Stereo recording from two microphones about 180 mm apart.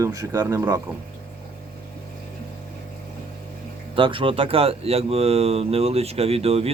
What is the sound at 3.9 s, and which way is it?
Speech, 30° right (ahead or behind).